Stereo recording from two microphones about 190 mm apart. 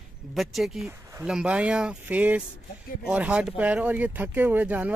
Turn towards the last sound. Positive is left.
turn(degrees=-10)  # may be behind; listen again after turning